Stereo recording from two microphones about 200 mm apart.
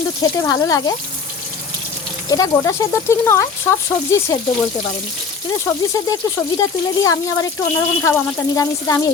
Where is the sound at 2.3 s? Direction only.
15° left (ahead or behind).